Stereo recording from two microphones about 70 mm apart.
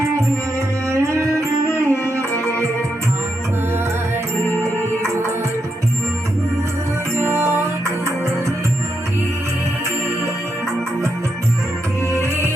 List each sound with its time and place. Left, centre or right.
0.9 s music: right
7.2 s music: right